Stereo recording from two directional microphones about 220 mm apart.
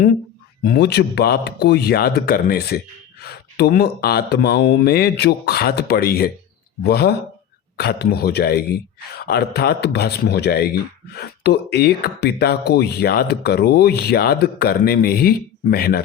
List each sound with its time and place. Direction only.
0.6 s a man's voice: 45° left (ahead or behind)